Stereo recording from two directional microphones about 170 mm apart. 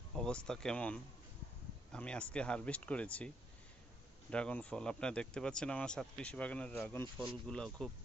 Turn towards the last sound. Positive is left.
turn(degrees=5)  # may be behind; listen again after turning